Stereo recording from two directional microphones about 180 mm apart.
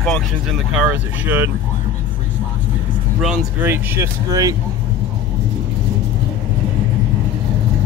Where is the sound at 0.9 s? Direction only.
10° right (ahead or behind).